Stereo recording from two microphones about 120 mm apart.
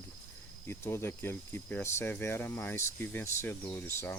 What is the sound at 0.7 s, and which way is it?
Speech, 20° left (ahead or behind).